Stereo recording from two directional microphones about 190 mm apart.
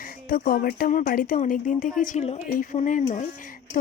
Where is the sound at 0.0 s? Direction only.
45° left (ahead or behind).